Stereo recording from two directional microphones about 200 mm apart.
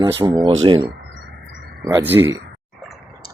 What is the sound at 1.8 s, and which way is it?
Speech, 10° right (ahead or behind).